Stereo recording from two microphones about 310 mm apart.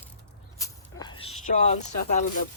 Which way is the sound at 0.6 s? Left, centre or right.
Centre.